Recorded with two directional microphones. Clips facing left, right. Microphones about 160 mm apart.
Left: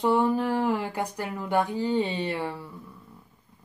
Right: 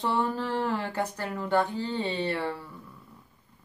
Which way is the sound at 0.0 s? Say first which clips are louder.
Left 5 dB; 15° left (ahead or behind).